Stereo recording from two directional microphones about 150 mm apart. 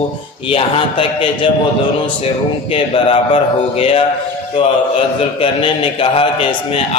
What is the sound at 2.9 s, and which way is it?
Mantra, 35° left (ahead or behind).